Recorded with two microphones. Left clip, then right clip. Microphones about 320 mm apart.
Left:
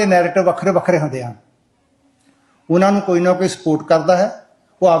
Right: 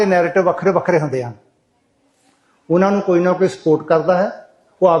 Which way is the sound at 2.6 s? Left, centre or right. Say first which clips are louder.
Even; centre.